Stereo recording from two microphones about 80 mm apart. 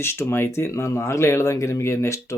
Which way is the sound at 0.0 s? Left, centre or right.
Left.